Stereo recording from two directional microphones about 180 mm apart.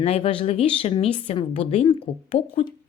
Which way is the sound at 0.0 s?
35° left (ahead or behind).